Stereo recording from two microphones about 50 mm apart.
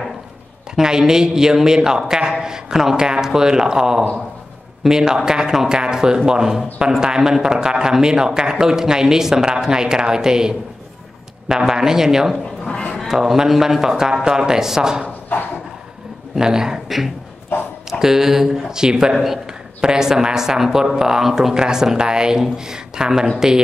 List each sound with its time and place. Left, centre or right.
0.7 s speech: centre
12.6 s speech: centre
13.1 s speech: centre
16.3 s speech: centre